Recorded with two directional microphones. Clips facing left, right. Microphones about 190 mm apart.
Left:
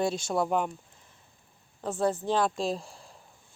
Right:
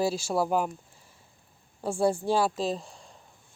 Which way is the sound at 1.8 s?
10° right (ahead or behind).